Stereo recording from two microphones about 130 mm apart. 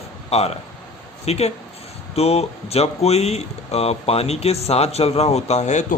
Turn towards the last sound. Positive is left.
turn(degrees=70)  # may be behind; listen again after turning